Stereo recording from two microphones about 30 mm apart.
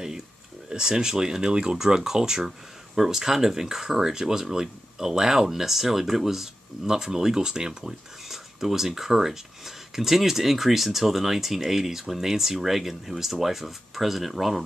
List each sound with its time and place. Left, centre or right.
0.7 s speech: right
1.8 s speech: centre
8.3 s speech: centre